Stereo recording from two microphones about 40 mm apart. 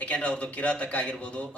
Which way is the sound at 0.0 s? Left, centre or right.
Left.